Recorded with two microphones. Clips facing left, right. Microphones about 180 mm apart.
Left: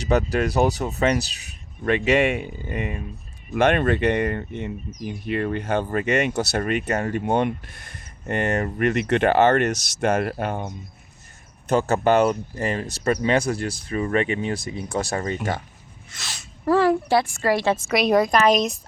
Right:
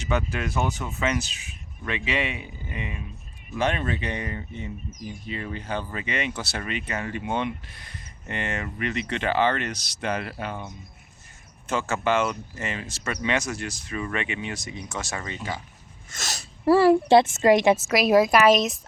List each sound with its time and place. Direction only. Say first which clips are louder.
0.0 s speech: left 6 dB; 40° left (ahead or behind)
3.5 s speech: left 7 dB; 60° left (ahead or behind); by 15.4 s 40° left (ahead or behind)
15.4 s speech: left 6 dB; 65° left (ahead or behind)
16.0 s speech: right 4 dB; 45° right (ahead or behind)
16.6 s speech: right 2 dB; 10° right (ahead or behind)
17.1 s a woman's voice: right 4 dB; 20° right (ahead or behind)
17.7 s a woman's voice: even; 5° right (ahead or behind)